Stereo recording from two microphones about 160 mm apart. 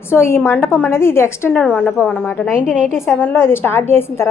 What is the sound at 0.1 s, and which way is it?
Speech, 15° left (ahead or behind).